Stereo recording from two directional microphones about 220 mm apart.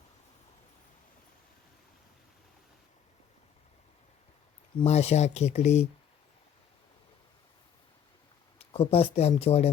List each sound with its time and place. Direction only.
4.8 s speech: 30° left (ahead or behind)
8.5 s speech: 25° left (ahead or behind)